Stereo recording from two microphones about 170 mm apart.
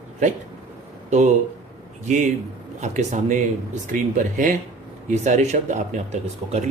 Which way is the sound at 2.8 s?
45° right (ahead or behind).